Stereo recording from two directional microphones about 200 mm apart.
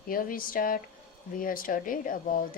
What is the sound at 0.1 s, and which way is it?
A woman's voice, 45° left (ahead or behind).